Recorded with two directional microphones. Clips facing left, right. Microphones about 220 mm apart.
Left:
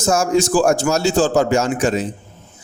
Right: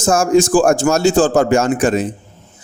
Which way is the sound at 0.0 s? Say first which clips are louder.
Right 4 dB; 50° right (ahead or behind).